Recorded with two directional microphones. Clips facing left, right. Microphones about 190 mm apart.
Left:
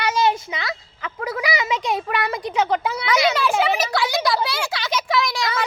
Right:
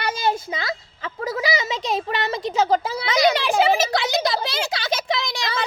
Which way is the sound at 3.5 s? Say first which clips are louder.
Right 2 dB; 30° right (ahead or behind).